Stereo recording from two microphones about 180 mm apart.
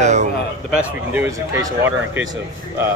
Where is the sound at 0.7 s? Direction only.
10° right (ahead or behind).